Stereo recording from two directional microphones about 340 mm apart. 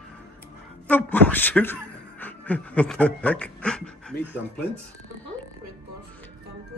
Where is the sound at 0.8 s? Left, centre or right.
Centre.